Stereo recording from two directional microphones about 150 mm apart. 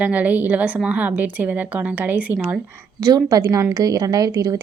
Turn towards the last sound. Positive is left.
turn(degrees=-25)  # may be behind; listen again after turning